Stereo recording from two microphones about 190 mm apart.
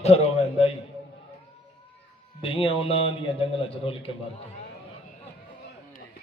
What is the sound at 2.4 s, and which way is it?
A man's voice, 30° left (ahead or behind).